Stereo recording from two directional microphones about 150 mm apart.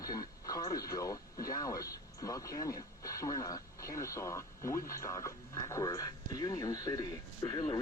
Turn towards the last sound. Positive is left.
turn(degrees=25)  # may be behind; listen again after turning